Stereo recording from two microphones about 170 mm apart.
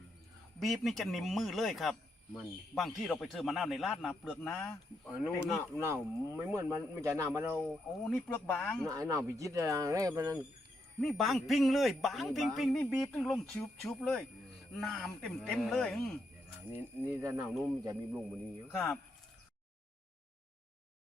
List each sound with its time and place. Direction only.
0.6 s speech: centre (ahead or behind)
5.7 s speech: 15° right (ahead or behind)
7.6 s speech: 5° left (ahead or behind)
8.9 s speech: 20° right (ahead or behind)
11.0 s speech: centre (ahead or behind)
16.6 s speech: 15° right (ahead or behind)
18.1 s speech: centre (ahead or behind)